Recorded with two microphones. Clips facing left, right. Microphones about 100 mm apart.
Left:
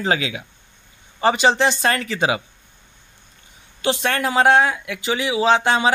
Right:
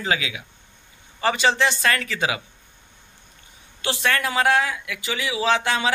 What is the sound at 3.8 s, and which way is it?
A man's voice, 25° left (ahead or behind).